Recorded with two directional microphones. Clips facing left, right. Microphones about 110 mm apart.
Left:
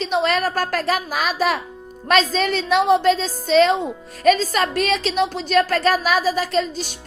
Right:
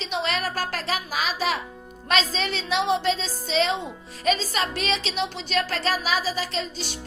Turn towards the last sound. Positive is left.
turn(degrees=45)  # may be behind; listen again after turning